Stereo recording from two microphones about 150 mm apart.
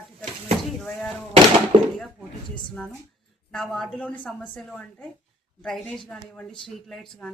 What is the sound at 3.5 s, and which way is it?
Speech, centre (ahead or behind).